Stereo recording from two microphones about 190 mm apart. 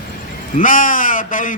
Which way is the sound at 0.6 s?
45° left (ahead or behind).